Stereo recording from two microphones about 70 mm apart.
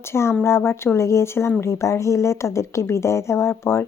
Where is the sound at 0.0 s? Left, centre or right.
Left.